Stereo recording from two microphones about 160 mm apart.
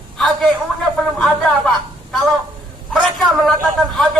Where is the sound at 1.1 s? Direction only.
5° left (ahead or behind).